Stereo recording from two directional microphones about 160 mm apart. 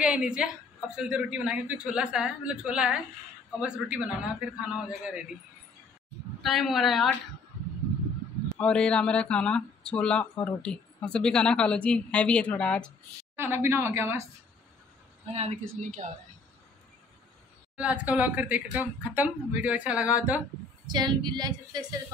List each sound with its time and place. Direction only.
0.0 s a woman's voice: 5° right (ahead or behind)
6.4 s a woman's voice: centre (ahead or behind)
8.5 s a woman's voice: 5° left (ahead or behind)
13.4 s speech: 15° right (ahead or behind)
15.3 s speech: 50° right (ahead or behind)
17.7 s speech: 10° right (ahead or behind)
20.8 s a woman's voice: 25° right (ahead or behind)